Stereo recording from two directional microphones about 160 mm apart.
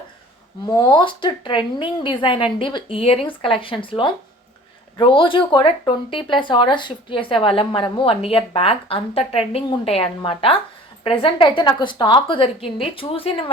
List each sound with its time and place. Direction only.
0.7 s speech: 30° left (ahead or behind)